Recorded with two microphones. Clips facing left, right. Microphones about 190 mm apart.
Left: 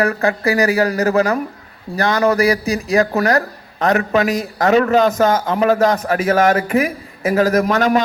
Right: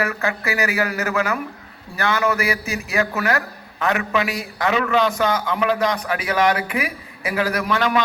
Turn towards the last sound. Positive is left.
turn(degrees=45)  # may be behind; listen again after turning